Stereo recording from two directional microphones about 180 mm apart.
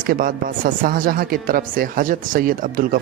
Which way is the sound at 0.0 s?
50° right (ahead or behind).